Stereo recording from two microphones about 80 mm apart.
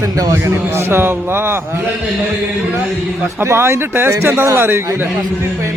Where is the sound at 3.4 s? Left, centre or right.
Right.